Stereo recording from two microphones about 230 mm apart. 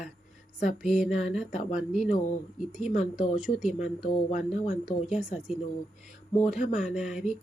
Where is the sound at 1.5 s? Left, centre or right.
Left.